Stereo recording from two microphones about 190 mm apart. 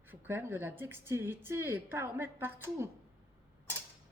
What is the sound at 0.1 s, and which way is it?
A woman's voice, 10° right (ahead or behind).